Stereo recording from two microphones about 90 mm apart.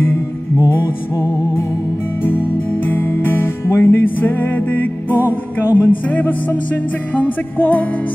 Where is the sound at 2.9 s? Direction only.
25° left (ahead or behind).